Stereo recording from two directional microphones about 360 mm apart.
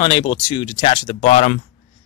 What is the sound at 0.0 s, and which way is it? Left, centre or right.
Speech, centre.